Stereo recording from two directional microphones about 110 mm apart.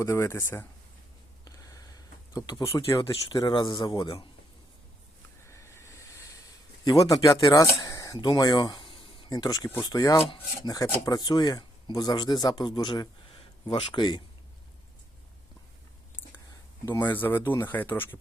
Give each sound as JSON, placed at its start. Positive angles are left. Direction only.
{"t": 0.0, "sound": "speech", "side_deg": 25}
{"t": 1.5, "sound": "a sound", "side_deg": 35}
{"t": 2.7, "sound": "speech", "side_deg": 30}
{"t": 3.0, "sound": "speech", "side_deg": 40}
{"t": 5.5, "sound": "a sound", "side_deg": 25}
{"t": 9.3, "sound": "speech", "side_deg": 35}
{"t": 16.9, "sound": "speech", "side_deg": 20}